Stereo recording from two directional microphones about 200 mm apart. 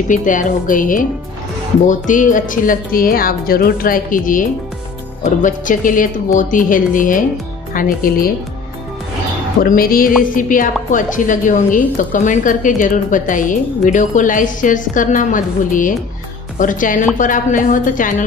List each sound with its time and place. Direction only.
0.1 s a woman's voice: 40° left (ahead or behind)
9.6 s a woman's voice: 45° left (ahead or behind)